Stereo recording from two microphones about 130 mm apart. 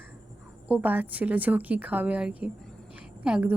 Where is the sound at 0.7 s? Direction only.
15° right (ahead or behind).